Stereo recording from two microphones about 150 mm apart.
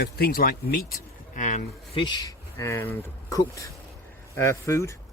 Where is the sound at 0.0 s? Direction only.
90° left.